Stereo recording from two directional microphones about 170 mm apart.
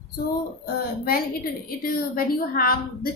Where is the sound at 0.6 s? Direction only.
60° left (ahead or behind).